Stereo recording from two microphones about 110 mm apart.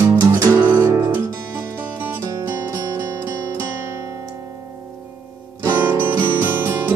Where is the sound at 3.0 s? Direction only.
20° right (ahead or behind).